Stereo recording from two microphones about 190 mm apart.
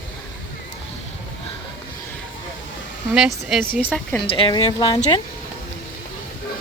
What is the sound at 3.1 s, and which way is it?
Speech, 5° right (ahead or behind).